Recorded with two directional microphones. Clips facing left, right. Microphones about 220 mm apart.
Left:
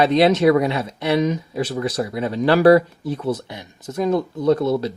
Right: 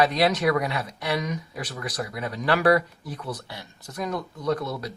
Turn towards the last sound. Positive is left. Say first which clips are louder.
# left 9 dB
turn(degrees=25)  # may be behind; listen again after turning